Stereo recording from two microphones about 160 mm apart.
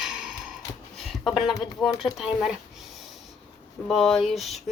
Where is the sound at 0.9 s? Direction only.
Centre (ahead or behind).